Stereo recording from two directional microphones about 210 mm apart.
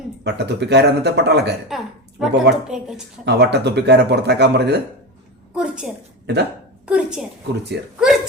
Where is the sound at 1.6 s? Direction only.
Centre (ahead or behind).